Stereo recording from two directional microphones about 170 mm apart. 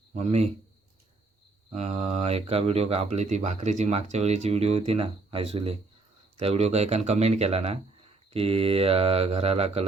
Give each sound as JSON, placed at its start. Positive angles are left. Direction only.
{"t": 0.1, "sound": "a man's voice", "side_deg": -40}
{"t": 1.7, "sound": "speech", "side_deg": -40}